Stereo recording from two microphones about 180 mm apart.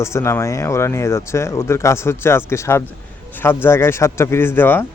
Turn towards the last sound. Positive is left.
turn(degrees=10)  # may be behind; listen again after turning